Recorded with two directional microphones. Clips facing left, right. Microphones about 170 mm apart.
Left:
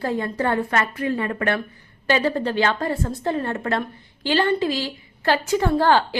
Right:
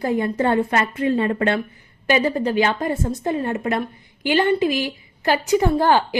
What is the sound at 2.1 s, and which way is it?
A woman's voice, 15° right (ahead or behind).